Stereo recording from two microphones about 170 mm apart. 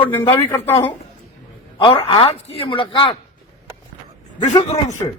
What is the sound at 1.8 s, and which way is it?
A man's voice, 30° left (ahead or behind).